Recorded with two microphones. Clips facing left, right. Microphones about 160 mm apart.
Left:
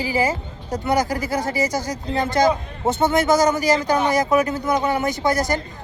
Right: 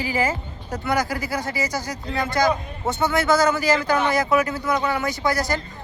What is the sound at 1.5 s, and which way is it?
A man's voice, 20° left (ahead or behind).